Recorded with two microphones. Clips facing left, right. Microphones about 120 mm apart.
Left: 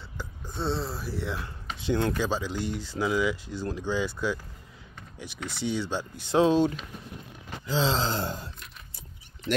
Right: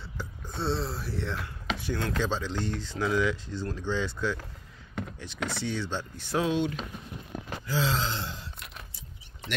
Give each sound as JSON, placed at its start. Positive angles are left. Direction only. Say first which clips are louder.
{"t": 0.2, "sound": "speech", "louder": "left 1 dB", "side_deg": 0}
{"t": 1.8, "sound": "gasp", "louder": "left 8 dB", "side_deg": 20}
{"t": 2.1, "sound": "speech", "louder": "left 1 dB", "side_deg": 10}
{"t": 5.6, "sound": "speech", "louder": "left 6 dB", "side_deg": 15}
{"t": 6.4, "sound": "speech", "louder": "left 6 dB", "side_deg": 35}
{"t": 7.6, "sound": "gasp", "louder": "left 3 dB", "side_deg": 25}
{"t": 8.1, "sound": "a sound", "louder": "left 5 dB", "side_deg": 45}